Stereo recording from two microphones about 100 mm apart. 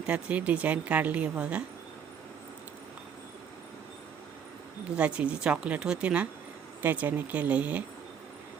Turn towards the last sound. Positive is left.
turn(degrees=-15)  # may be behind; listen again after turning